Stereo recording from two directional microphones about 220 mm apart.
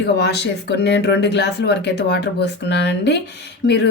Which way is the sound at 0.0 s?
50° left (ahead or behind).